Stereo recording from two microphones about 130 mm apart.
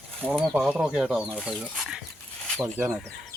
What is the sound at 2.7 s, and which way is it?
Speech, 15° right (ahead or behind).